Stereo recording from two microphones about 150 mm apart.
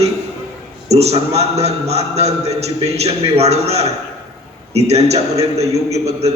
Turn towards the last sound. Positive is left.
turn(degrees=-45)  # may be behind; listen again after turning